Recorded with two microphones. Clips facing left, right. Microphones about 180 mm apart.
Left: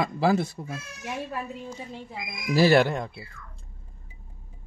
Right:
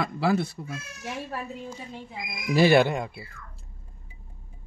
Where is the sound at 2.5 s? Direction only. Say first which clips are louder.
Even; 15° right (ahead or behind).